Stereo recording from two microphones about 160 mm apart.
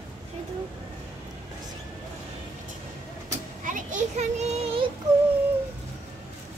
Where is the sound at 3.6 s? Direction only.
55° right (ahead or behind).